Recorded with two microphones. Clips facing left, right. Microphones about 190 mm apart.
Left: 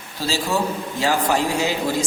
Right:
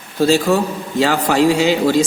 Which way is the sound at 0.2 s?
55° right (ahead or behind).